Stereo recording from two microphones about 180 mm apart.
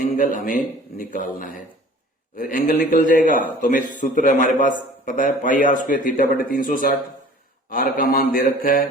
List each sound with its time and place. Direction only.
0.2 s a man's voice: 45° left (ahead or behind)